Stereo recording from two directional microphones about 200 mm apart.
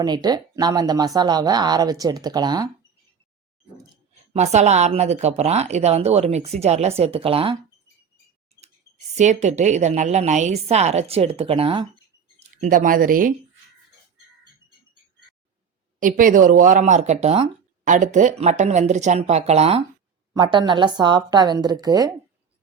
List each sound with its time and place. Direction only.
0.0 s speech: 20° right (ahead or behind)
4.3 s speech: 35° right (ahead or behind)
9.1 s speech: 35° right (ahead or behind)
12.4 s speech: 40° right (ahead or behind)
16.0 s speech: 40° right (ahead or behind); by 22.1 s 20° right (ahead or behind)